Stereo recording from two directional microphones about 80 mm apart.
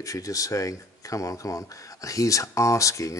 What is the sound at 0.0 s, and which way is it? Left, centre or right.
Speech, left.